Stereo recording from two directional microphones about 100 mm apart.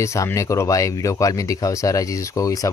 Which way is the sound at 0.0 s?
30° left (ahead or behind).